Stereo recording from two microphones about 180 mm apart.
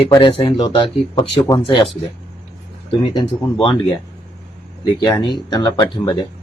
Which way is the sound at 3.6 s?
30° left (ahead or behind).